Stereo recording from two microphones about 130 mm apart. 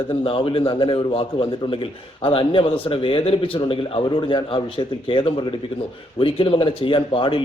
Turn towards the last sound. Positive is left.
turn(degrees=40)  # may be behind; listen again after turning